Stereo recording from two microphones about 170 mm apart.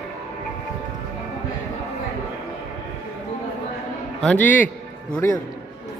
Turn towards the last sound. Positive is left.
turn(degrees=15)  # may be behind; listen again after turning